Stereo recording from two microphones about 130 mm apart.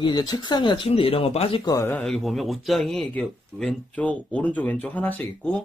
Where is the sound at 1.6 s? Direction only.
20° left (ahead or behind).